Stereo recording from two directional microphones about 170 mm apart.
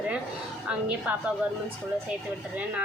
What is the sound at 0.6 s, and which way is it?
Speech, 5° right (ahead or behind).